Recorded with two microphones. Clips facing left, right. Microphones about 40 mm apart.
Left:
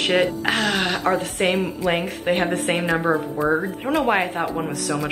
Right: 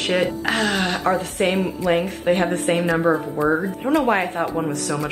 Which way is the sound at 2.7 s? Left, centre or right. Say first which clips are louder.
Right 3 dB; left.